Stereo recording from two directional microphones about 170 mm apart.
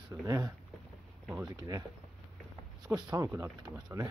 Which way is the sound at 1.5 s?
20° right (ahead or behind).